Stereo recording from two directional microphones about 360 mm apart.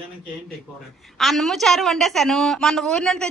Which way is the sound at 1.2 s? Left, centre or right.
Centre.